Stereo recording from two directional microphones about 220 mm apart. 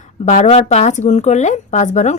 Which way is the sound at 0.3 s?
30° left (ahead or behind).